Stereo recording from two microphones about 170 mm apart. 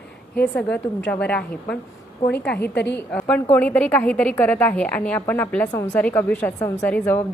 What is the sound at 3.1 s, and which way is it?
A woman's voice, 5° left (ahead or behind).